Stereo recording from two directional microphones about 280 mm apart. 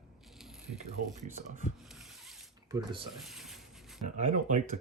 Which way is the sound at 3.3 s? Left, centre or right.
Centre.